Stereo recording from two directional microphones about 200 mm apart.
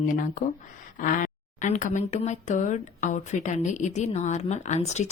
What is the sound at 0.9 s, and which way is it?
A woman's voice, 40° left (ahead or behind).